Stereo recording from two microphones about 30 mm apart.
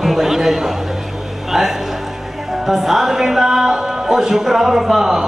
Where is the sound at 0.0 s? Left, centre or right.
Centre.